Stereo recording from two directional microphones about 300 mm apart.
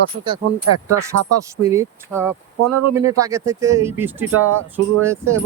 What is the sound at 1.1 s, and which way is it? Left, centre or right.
Speech, right.